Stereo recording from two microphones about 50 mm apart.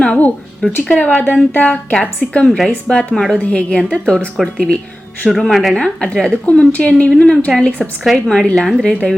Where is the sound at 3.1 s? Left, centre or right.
Centre.